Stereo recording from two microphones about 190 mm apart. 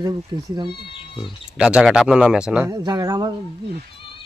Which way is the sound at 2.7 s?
20° right (ahead or behind).